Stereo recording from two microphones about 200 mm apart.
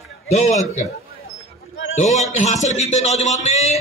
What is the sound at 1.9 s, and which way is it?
A man's voice, 35° left (ahead or behind).